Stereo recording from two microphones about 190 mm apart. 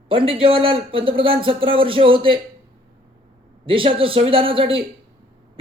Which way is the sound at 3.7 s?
30° right (ahead or behind).